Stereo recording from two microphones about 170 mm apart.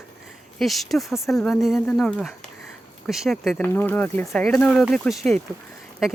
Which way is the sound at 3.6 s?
10° left (ahead or behind).